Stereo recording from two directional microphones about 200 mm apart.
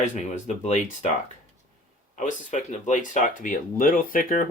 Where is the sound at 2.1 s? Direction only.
40° left (ahead or behind).